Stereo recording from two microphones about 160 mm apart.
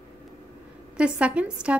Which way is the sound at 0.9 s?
5° right (ahead or behind).